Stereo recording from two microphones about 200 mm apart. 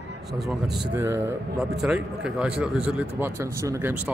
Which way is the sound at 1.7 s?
5° right (ahead or behind).